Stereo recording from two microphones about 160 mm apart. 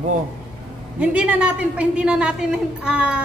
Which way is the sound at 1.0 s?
10° right (ahead or behind).